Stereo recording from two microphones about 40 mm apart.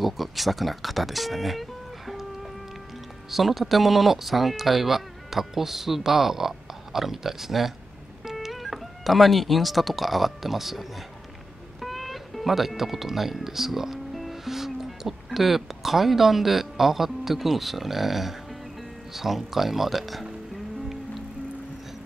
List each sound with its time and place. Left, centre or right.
0.0 s speech: centre